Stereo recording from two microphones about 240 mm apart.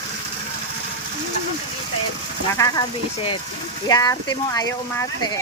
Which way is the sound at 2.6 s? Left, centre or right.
Centre.